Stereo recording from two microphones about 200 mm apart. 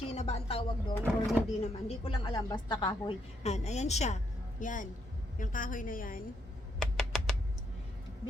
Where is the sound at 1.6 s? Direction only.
30° left (ahead or behind).